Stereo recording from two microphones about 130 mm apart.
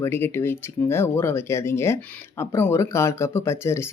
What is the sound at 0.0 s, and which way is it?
Speech, 20° left (ahead or behind).